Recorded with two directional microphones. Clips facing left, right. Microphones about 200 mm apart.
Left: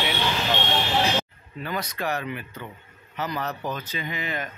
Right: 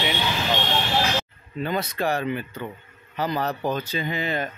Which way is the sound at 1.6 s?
25° right (ahead or behind).